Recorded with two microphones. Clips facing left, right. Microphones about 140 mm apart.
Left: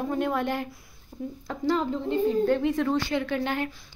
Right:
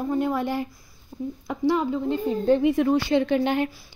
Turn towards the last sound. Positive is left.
turn(degrees=-20)  # may be behind; listen again after turning